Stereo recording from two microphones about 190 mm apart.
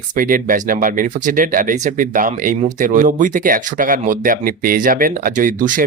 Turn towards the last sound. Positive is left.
turn(degrees=-45)  # may be behind; listen again after turning